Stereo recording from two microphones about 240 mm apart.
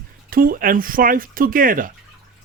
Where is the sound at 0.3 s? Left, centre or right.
Right.